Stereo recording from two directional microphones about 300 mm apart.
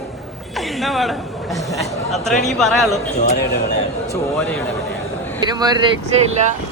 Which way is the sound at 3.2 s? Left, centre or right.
Left.